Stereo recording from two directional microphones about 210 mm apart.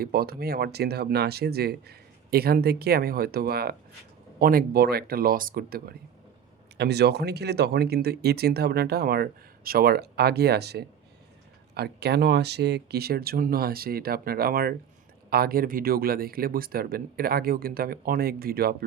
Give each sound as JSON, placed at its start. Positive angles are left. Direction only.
{"t": 0.0, "sound": "speech", "side_deg": -45}